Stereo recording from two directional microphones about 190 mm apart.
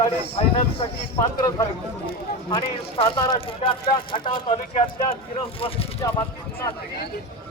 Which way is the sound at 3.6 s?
30° left (ahead or behind).